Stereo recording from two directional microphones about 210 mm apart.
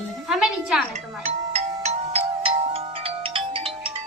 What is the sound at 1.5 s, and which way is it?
Music, 30° right (ahead or behind).